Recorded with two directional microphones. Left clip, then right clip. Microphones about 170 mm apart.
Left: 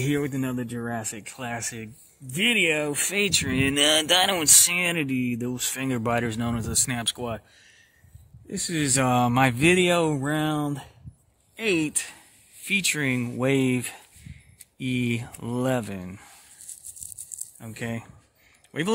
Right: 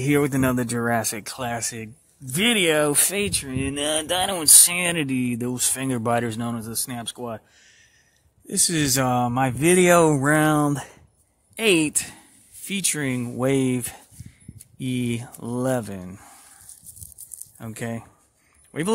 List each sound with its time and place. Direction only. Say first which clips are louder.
0.1 s speech: right 11 dB; 35° right (ahead or behind); by 1.9 s 15° right (ahead or behind)
2.4 s speech: right 3 dB; 40° right (ahead or behind)
3.1 s speech: left 1 dB; 10° right (ahead or behind)
3.3 s speech: left 5 dB; centre (ahead or behind)
8.5 s speech: right 4 dB; 25° right (ahead or behind)
9.0 s speech: left 4 dB; centre (ahead or behind)
9.8 s speech: right 7 dB; 30° right (ahead or behind); by 16.3 s 10° right (ahead or behind)
17.7 s speech: right 1 dB; 15° right (ahead or behind)